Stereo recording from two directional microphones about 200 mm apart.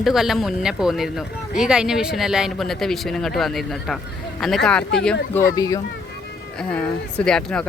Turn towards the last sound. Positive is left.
turn(degrees=5)  # may be behind; listen again after turning